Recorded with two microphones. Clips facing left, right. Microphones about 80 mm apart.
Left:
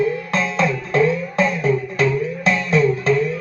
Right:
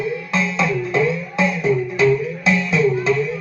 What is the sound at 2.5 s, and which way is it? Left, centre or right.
Music, left.